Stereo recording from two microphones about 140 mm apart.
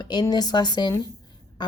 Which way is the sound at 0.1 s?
30° left (ahead or behind).